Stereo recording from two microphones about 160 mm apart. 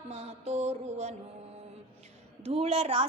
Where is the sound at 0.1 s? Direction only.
45° right (ahead or behind).